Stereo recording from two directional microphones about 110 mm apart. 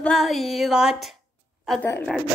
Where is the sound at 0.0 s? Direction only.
Centre (ahead or behind).